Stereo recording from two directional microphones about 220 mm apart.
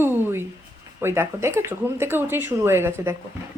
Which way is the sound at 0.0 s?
10° right (ahead or behind).